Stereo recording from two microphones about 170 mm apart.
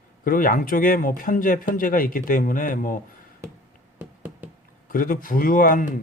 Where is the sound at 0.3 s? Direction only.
55° left (ahead or behind).